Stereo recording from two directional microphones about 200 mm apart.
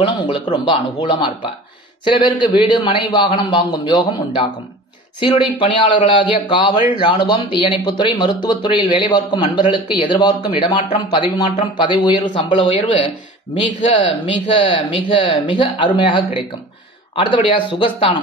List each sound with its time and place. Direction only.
0.0 s a man's voice: 25° left (ahead or behind)